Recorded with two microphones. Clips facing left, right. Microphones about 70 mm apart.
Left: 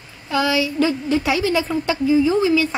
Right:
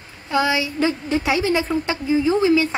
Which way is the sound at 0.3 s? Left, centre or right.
Right.